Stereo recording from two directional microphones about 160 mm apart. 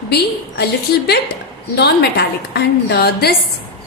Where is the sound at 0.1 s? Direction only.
90° left.